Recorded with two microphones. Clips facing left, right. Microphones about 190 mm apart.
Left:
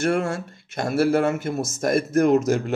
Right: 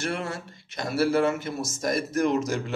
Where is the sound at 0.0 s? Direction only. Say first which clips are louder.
Left 8 dB; 50° left (ahead or behind).